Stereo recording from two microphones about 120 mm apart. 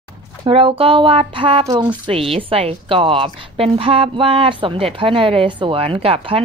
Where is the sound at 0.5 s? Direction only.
50° right (ahead or behind).